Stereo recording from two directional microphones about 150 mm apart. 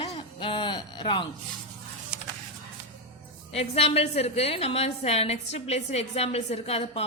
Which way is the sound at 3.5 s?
40° left (ahead or behind).